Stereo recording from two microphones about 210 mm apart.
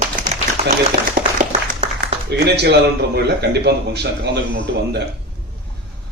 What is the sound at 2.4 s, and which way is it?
A man's voice, 50° right (ahead or behind).